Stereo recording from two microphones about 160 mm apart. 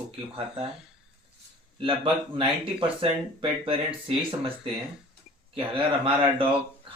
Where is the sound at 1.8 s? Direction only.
35° right (ahead or behind).